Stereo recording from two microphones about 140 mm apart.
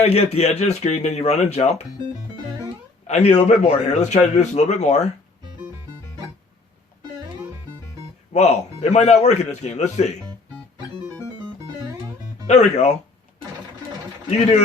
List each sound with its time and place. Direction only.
0.0 s a man's voice: 50° left (ahead or behind)
3.1 s a man's voice: 55° left (ahead or behind)
8.3 s a man's voice: 50° left (ahead or behind)
11.9 s music: 25° right (ahead or behind)
12.5 s a man's voice: 55° left (ahead or behind)